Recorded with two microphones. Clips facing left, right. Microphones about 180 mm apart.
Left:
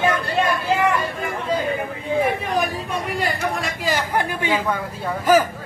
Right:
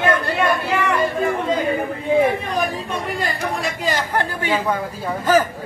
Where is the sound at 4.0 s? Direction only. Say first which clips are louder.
Even; 15° left (ahead or behind).